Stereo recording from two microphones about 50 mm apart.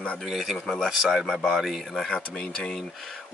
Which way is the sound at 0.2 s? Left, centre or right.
Centre.